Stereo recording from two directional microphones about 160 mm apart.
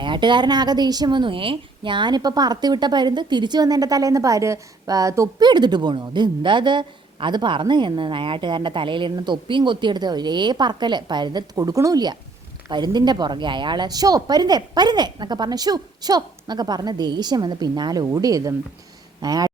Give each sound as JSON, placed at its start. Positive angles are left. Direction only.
{"t": 0.0, "sound": "a woman's voice", "side_deg": -30}